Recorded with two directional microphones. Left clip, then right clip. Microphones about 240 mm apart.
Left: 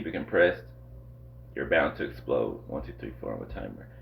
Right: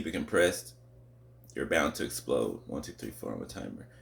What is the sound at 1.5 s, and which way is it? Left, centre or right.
Speech, right.